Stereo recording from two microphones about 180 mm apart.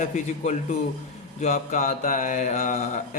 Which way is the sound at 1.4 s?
40° left (ahead or behind).